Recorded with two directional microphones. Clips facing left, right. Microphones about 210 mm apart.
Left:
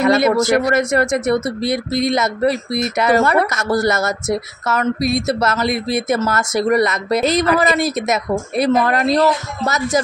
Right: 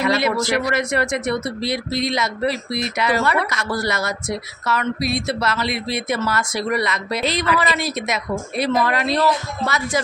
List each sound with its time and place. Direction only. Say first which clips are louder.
0.0 s speech: left 6 dB; 50° left (ahead or behind)